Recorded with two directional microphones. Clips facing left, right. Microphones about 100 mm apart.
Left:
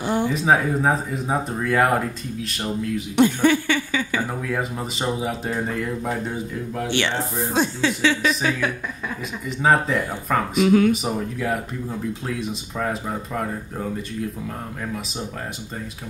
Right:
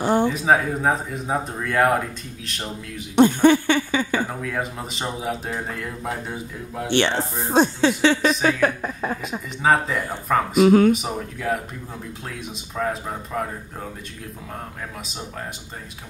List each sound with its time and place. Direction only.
0.0 s a sound: 35° right (ahead or behind)
0.3 s speech: centre (ahead or behind)
3.2 s a sound: 30° right (ahead or behind)
4.4 s speech: centre (ahead or behind)
6.9 s speech: 30° right (ahead or behind)
9.6 s speech: centre (ahead or behind)
10.6 s speech: 40° right (ahead or behind)
10.9 s speech: centre (ahead or behind)